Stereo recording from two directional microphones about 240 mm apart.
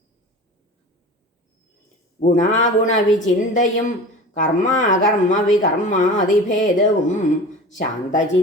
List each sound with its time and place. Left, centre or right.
2.2 s speech: left
2.6 s speech: left